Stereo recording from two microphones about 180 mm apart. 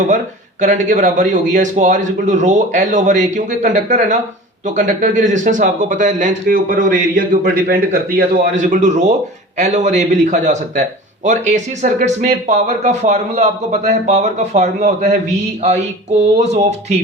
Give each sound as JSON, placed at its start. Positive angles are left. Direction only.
{"t": 0.6, "sound": "speech", "side_deg": -45}
{"t": 8.7, "sound": "a man's voice", "side_deg": -40}